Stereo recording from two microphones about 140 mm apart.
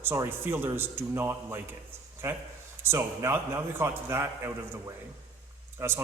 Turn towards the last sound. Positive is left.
turn(degrees=-20)  # may be behind; listen again after turning